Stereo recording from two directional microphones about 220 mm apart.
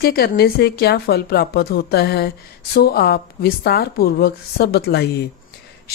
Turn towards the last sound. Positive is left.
turn(degrees=45)  # may be behind; listen again after turning